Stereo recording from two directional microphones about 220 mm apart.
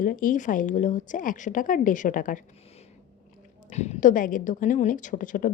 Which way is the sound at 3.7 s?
30° left (ahead or behind).